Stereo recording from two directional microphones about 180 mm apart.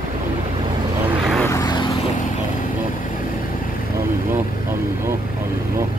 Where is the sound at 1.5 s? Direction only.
20° left (ahead or behind).